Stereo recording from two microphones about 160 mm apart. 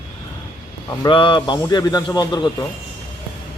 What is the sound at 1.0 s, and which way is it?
Speech, 30° left (ahead or behind).